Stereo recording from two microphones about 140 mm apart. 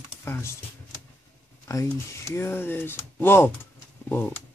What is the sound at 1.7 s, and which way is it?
Speech, 20° left (ahead or behind).